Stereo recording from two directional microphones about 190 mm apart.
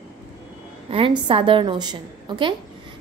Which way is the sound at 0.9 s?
25° right (ahead or behind).